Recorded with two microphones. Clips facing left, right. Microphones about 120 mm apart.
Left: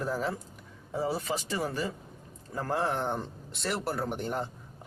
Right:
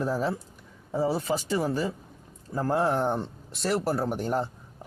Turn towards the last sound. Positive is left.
turn(degrees=-40)  # may be behind; listen again after turning